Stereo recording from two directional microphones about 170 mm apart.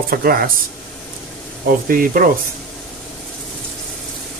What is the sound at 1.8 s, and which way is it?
Speech, 55° right (ahead or behind).